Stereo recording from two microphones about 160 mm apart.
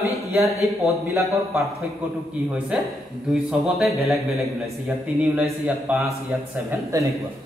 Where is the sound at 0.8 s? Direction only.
15° right (ahead or behind).